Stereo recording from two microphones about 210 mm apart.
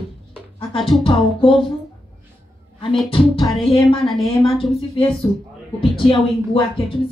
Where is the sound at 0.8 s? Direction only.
Centre (ahead or behind).